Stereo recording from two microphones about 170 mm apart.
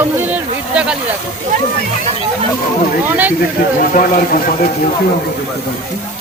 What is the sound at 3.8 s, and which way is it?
Speech, 55° left (ahead or behind).